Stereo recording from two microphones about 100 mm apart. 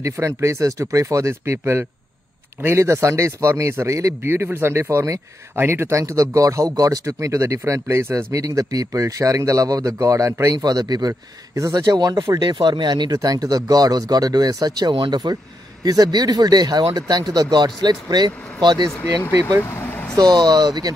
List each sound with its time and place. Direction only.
0.0 s a man's voice: 30° right (ahead or behind)
12.2 s speech: 30° right (ahead or behind)
12.4 s a man's voice: 50° right (ahead or behind)
19.6 s speech: 20° left (ahead or behind)
20.2 s a man's voice: 40° right (ahead or behind)